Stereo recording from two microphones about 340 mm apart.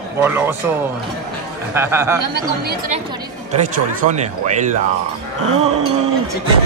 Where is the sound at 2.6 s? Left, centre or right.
Right.